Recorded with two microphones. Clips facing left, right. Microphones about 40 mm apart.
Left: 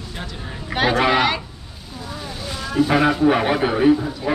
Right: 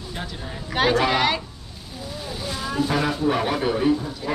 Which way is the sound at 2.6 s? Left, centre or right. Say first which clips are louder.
Left 5 dB; centre.